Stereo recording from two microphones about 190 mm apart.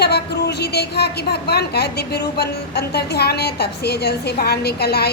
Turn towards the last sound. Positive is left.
turn(degrees=55)  # may be behind; listen again after turning